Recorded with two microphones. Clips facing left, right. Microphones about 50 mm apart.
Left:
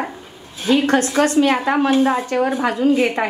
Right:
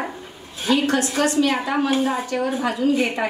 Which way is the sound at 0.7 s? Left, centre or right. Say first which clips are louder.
Left 4 dB; left.